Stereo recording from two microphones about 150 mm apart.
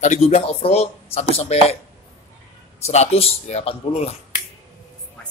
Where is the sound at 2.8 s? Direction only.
45° left (ahead or behind).